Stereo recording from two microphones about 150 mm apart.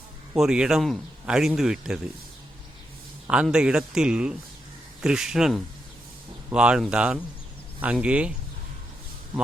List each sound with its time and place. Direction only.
0.3 s speech: 5° right (ahead or behind)
3.2 s speech: 5° right (ahead or behind)